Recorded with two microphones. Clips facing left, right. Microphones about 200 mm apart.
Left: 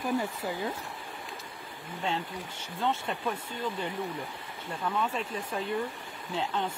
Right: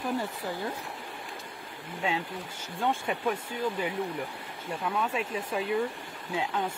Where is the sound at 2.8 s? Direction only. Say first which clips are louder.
Right 2 dB; 10° right (ahead or behind).